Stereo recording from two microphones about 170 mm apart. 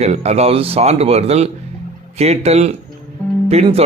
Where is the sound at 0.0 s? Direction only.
40° right (ahead or behind).